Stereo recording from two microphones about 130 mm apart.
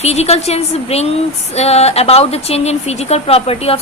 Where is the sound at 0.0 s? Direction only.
55° left (ahead or behind).